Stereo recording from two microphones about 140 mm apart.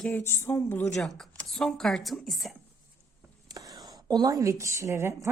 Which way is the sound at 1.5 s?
5° left (ahead or behind).